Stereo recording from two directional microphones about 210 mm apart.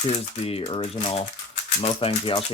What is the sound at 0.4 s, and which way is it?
Speech, 30° left (ahead or behind).